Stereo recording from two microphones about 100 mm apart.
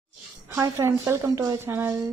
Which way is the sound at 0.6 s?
30° right (ahead or behind).